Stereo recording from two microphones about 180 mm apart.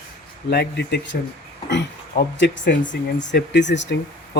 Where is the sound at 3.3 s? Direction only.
75° left (ahead or behind).